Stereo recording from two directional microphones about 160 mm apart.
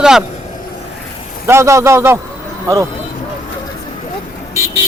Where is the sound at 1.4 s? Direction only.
15° right (ahead or behind).